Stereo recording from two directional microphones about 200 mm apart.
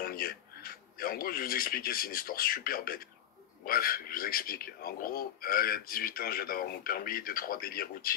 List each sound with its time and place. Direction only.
0.0 s speech: 45° left (ahead or behind)